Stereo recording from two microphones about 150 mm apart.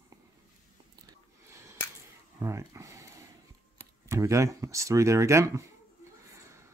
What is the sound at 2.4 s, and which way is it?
Speech, 20° right (ahead or behind).